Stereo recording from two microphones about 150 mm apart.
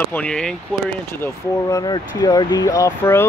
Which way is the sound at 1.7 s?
25° left (ahead or behind).